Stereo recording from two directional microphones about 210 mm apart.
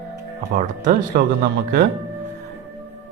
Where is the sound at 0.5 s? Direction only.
40° right (ahead or behind).